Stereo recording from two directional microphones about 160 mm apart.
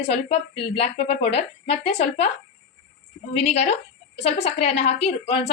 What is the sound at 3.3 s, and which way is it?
A woman's voice, 45° left (ahead or behind).